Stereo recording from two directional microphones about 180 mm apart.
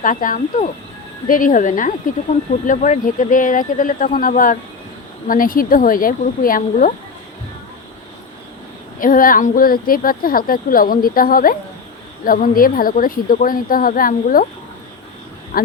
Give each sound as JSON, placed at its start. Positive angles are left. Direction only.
{"t": 0.0, "sound": "speech", "side_deg": 50}
{"t": 9.0, "sound": "speech", "side_deg": 50}
{"t": 15.5, "sound": "speech", "side_deg": 50}